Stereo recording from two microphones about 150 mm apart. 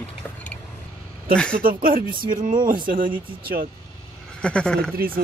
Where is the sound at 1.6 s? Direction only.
70° right (ahead or behind).